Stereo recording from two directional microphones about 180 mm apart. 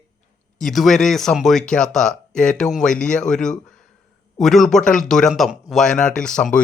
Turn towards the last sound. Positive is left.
turn(degrees=5)  # may be behind; listen again after turning